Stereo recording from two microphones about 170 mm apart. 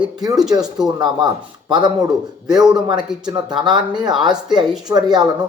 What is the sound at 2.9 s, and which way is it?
Speech, 5° right (ahead or behind).